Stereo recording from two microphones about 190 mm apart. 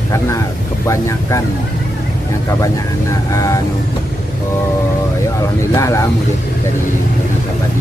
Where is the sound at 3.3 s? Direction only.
15° left (ahead or behind).